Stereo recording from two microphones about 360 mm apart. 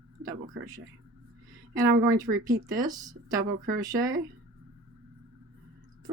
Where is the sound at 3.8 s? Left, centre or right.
Centre.